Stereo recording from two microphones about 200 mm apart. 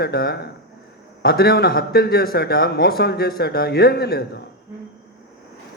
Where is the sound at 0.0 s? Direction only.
50° left (ahead or behind).